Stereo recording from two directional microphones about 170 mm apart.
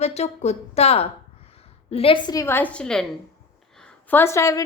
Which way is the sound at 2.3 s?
15° left (ahead or behind).